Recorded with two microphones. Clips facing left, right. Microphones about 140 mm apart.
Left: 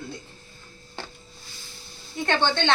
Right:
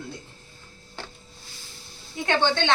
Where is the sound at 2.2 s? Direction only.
10° right (ahead or behind).